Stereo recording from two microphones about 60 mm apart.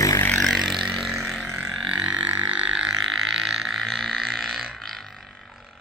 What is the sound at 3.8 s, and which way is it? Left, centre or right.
Frog, centre.